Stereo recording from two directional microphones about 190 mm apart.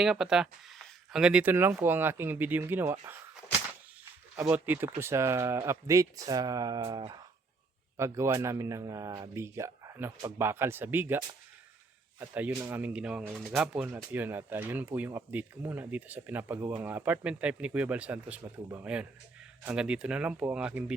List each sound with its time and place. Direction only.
0.0 s speech: 5° right (ahead or behind)
4.4 s speech: 10° right (ahead or behind)
12.2 s speech: 10° right (ahead or behind)